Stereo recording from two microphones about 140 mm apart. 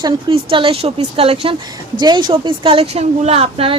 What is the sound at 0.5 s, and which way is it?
A woman's voice, 40° right (ahead or behind).